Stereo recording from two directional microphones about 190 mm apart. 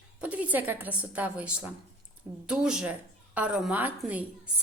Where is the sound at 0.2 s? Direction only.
5° right (ahead or behind).